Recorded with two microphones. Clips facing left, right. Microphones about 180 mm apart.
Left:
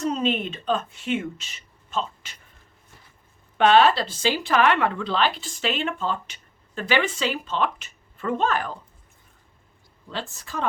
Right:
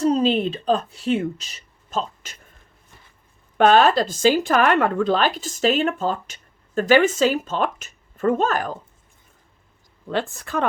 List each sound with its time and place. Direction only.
0.0 s speech: 35° right (ahead or behind)
3.6 s speech: 45° right (ahead or behind)
10.1 s a woman's voice: 55° right (ahead or behind)